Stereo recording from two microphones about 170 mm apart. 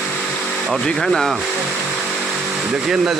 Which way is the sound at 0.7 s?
5° left (ahead or behind).